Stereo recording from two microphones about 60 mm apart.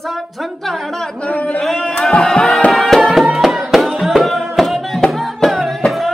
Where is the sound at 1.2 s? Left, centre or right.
Left.